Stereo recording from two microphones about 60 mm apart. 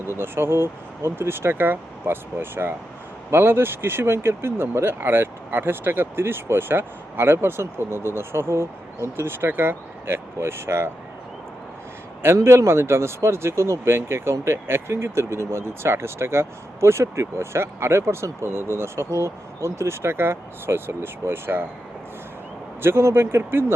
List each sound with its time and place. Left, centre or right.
0.2 s speech: right
12.2 s speech: right
22.8 s speech: right